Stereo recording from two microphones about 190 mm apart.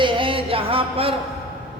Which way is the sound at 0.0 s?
25° right (ahead or behind).